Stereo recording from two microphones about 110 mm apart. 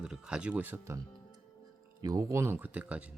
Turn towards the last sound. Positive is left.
turn(degrees=-15)  # may be behind; listen again after turning